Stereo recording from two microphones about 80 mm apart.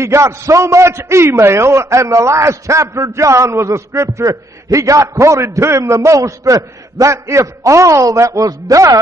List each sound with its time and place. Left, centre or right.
0.0 s a man's voice: right